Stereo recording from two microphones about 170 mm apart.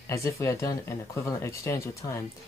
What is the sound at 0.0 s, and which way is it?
Speech, 15° left (ahead or behind).